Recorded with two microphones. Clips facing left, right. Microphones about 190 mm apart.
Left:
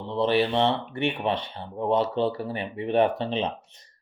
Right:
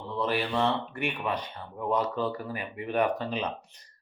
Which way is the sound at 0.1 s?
25° left (ahead or behind).